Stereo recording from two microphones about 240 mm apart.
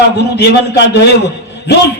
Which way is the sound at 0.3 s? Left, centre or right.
Left.